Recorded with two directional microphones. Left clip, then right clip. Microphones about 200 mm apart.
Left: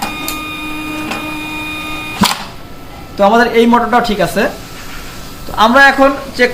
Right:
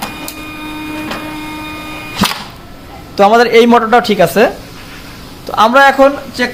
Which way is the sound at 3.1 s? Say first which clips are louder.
Right 2 dB; 55° right (ahead or behind).